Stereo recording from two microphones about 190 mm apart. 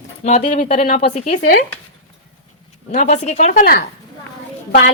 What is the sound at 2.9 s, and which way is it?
Speech, 40° left (ahead or behind).